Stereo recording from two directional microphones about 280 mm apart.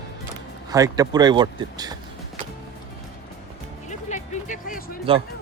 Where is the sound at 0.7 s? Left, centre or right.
Centre.